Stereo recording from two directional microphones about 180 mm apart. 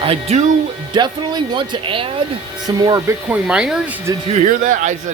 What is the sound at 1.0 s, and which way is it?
Speech, 25° right (ahead or behind).